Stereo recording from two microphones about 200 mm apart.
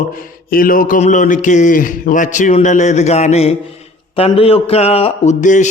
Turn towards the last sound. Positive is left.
turn(degrees=35)  # may be behind; listen again after turning